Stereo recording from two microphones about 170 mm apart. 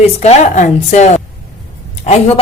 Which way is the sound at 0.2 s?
45° left (ahead or behind).